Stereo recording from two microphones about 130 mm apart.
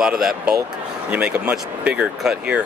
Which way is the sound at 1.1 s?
10° right (ahead or behind).